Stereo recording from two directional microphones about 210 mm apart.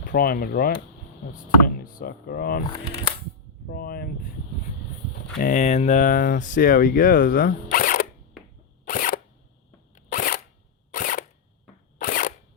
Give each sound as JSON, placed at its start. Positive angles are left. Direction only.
{"t": 0.0, "sound": "speech", "side_deg": 45}
{"t": 3.7, "sound": "speech", "side_deg": 45}
{"t": 5.4, "sound": "speech", "side_deg": 40}
{"t": 8.9, "sound": "camera", "side_deg": 40}
{"t": 9.9, "sound": "a sound", "side_deg": 40}
{"t": 10.9, "sound": "camera", "side_deg": 40}
{"t": 11.9, "sound": "a sound", "side_deg": 40}